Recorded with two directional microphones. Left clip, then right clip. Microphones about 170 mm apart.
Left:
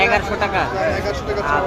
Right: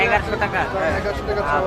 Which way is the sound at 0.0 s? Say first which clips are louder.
Left 2 dB; 55° left (ahead or behind).